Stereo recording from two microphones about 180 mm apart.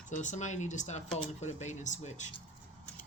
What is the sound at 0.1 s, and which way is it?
Speech, 40° left (ahead or behind).